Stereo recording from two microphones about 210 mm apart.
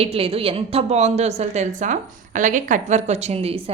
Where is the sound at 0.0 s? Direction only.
25° right (ahead or behind).